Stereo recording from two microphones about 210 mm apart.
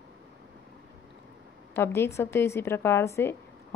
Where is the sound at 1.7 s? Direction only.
10° left (ahead or behind).